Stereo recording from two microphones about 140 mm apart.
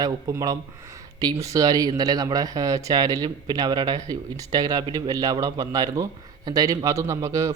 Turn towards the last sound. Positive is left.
turn(degrees=-20)  # may be behind; listen again after turning